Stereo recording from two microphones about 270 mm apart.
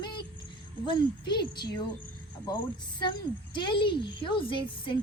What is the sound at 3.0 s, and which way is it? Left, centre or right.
A woman's voice, centre.